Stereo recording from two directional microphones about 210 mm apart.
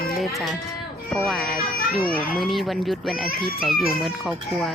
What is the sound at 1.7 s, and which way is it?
Speech, 45° left (ahead or behind).